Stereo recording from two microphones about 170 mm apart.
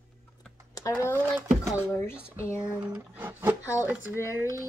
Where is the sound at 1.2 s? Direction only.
5° right (ahead or behind).